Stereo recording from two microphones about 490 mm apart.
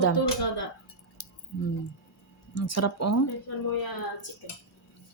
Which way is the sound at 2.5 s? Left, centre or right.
Left.